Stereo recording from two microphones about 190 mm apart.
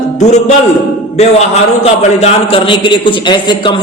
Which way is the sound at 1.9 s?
30° left (ahead or behind).